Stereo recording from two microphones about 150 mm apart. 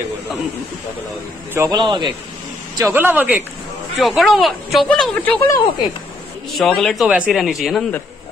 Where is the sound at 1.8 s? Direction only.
30° right (ahead or behind).